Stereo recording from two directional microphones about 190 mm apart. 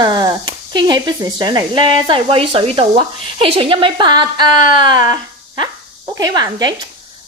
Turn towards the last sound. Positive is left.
turn(degrees=-20)  # may be behind; listen again after turning